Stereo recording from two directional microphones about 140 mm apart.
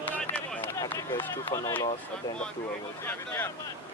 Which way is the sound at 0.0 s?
10° left (ahead or behind).